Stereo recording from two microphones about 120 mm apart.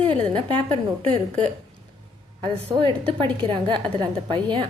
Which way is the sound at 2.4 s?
45° right (ahead or behind).